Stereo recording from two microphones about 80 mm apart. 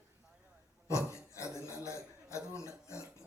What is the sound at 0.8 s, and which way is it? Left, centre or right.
A man's voice, left.